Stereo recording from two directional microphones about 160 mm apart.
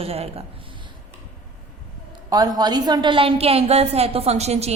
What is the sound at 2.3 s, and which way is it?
A woman's voice, 25° right (ahead or behind).